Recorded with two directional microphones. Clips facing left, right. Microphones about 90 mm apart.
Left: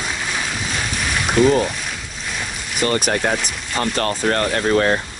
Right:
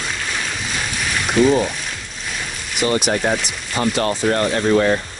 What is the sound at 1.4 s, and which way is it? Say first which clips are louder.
Speech: even; 5° right (ahead or behind).